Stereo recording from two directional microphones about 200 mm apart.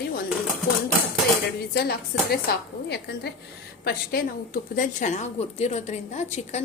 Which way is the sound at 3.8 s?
50° left (ahead or behind).